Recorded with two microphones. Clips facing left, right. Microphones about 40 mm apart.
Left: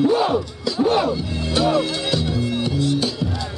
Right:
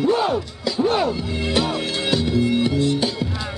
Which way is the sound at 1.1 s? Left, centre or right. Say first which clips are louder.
Even; right.